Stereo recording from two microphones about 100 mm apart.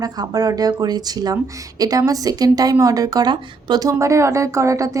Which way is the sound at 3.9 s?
30° right (ahead or behind).